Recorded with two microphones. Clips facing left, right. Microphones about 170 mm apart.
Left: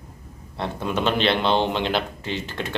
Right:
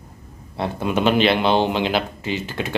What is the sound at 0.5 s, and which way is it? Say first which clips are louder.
A man's voice: right 4 dB; 5° right (ahead or behind).